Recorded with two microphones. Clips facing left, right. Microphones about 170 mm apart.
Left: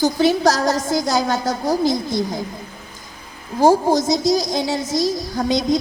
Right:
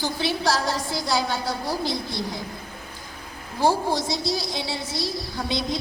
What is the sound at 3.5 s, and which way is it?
A woman's voice, 45° left (ahead or behind).